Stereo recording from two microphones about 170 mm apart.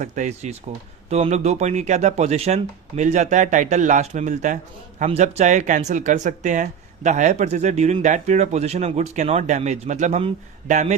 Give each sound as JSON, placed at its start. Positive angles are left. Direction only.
{"t": 0.0, "sound": "speech", "side_deg": -45}